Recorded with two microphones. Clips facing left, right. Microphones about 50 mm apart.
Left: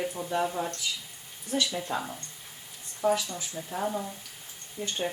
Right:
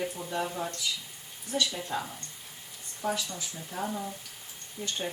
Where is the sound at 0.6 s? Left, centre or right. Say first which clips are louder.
Left 2 dB; centre.